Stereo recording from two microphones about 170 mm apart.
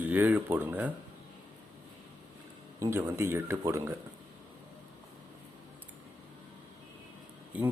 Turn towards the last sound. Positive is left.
turn(degrees=-10)  # may be behind; listen again after turning